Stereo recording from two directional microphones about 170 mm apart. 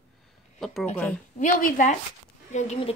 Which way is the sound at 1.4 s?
50° left (ahead or behind).